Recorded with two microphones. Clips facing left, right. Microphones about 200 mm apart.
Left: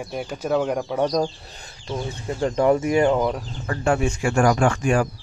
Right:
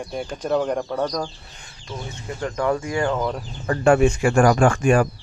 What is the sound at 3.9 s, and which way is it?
Speech, 65° right (ahead or behind).